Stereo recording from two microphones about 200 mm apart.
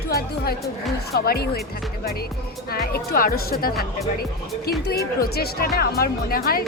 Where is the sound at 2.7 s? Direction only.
50° left (ahead or behind).